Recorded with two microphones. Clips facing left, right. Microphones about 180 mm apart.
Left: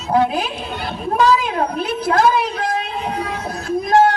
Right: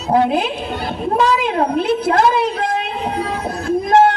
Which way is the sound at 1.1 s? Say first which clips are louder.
Even; 25° right (ahead or behind).